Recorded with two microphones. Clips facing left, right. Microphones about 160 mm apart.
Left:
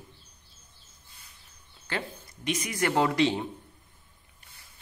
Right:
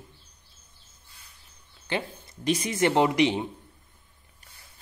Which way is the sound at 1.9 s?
20° right (ahead or behind).